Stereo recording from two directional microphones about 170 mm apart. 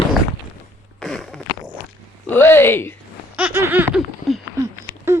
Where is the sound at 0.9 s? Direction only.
Centre (ahead or behind).